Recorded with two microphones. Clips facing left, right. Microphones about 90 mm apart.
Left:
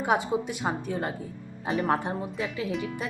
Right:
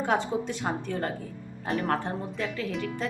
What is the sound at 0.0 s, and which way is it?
Speech, 10° left (ahead or behind).